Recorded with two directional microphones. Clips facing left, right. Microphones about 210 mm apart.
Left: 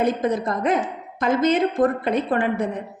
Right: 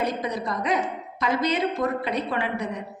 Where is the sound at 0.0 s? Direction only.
50° left (ahead or behind).